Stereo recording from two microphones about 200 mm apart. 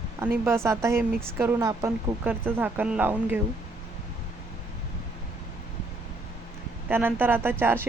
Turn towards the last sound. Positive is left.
turn(degrees=-10)  # may be behind; listen again after turning